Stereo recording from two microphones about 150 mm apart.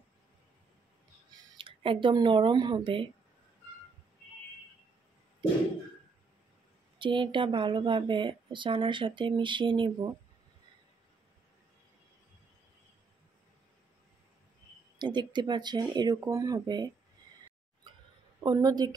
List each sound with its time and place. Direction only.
1.6 s speech: 35° right (ahead or behind)
7.0 s speech: 35° right (ahead or behind)
15.0 s speech: 30° right (ahead or behind)
18.4 s speech: 25° right (ahead or behind)